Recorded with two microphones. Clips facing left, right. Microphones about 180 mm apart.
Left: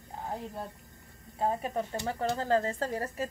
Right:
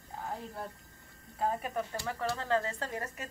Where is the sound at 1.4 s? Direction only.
25° left (ahead or behind).